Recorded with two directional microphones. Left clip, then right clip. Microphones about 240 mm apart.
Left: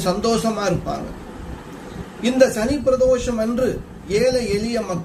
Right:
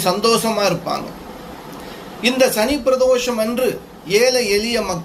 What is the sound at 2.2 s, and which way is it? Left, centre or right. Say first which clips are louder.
A man's voice: right 1 dB; centre.